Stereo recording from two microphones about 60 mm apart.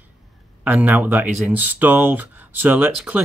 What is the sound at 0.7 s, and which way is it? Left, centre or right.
Speech, right.